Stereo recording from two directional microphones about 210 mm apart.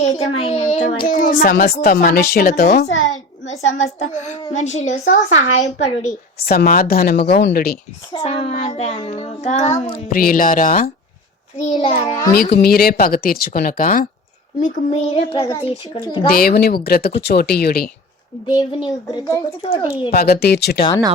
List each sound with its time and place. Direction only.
0.1 s child singing: 25° left (ahead or behind)
0.9 s speech: 40° left (ahead or behind)
3.4 s child singing: 35° left (ahead or behind)
6.4 s speech: 45° left (ahead or behind)
8.1 s child singing: 30° left (ahead or behind)
9.9 s child singing: 45° left (ahead or behind)
12.3 s speech: 45° left (ahead or behind); by 15.7 s 25° left (ahead or behind)
16.2 s speech: 45° left (ahead or behind)
18.4 s speech: 20° left (ahead or behind)
19.6 s speech: 30° left (ahead or behind)
20.1 s speech: 50° left (ahead or behind)